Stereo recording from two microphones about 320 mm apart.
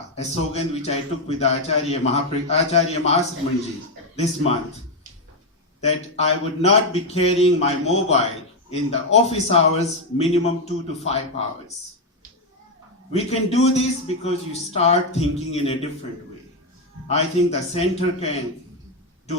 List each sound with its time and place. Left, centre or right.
0.2 s a man's voice: centre
5.8 s a man's voice: centre
13.1 s a man's voice: centre
17.1 s a man's voice: centre